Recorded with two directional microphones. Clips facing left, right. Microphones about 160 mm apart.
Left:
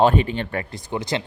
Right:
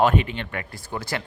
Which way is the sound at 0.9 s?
20° left (ahead or behind).